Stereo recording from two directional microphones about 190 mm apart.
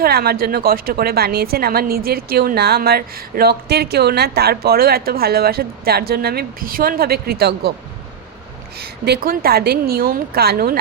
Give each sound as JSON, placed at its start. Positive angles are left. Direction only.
{"t": 0.0, "sound": "a woman's voice", "side_deg": -55}
{"t": 8.8, "sound": "a woman's voice", "side_deg": -55}